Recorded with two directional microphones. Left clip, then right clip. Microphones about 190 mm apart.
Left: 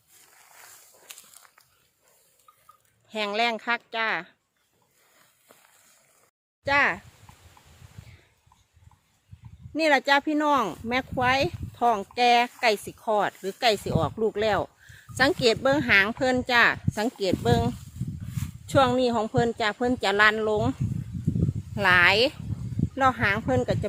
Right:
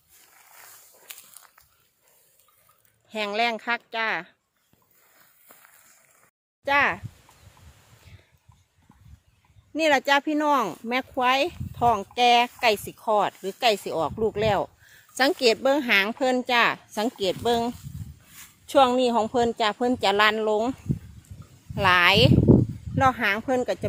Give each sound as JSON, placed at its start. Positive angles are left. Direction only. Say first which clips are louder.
{"t": 0.1, "sound": "wild animals", "louder": "right 1 dB", "side_deg": -15}
{"t": 1.0, "sound": "a sound", "louder": "right 2 dB", "side_deg": -20}
{"t": 3.1, "sound": "speech", "louder": "right 1 dB", "side_deg": 0}
{"t": 6.7, "sound": "speech", "louder": "right 1 dB", "side_deg": -5}
{"t": 9.7, "sound": "speech", "louder": "even", "side_deg": -5}
{"t": 21.8, "sound": "speech", "louder": "right 1 dB", "side_deg": -10}